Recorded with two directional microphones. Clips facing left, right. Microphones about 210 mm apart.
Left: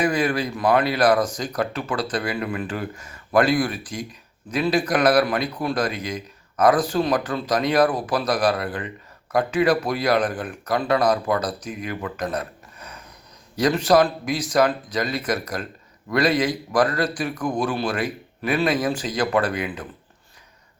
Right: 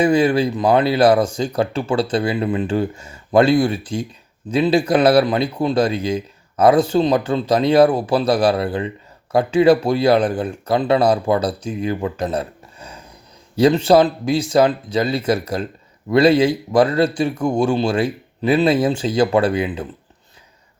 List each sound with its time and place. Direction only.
0.0 s a man's voice: 25° right (ahead or behind)